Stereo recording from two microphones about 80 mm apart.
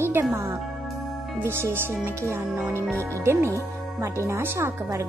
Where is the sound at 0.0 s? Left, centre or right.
Right.